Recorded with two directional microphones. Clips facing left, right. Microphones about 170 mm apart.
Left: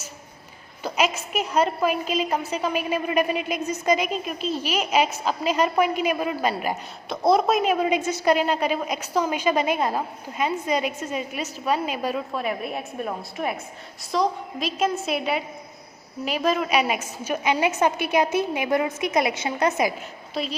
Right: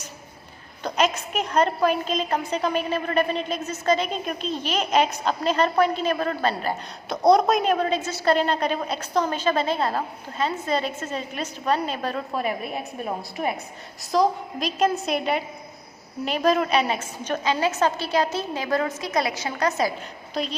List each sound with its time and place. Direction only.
0.8 s a woman's voice: 5° left (ahead or behind)
14.1 s a woman's voice: centre (ahead or behind); by 19.9 s 20° left (ahead or behind)
20.3 s a woman's voice: 5° left (ahead or behind)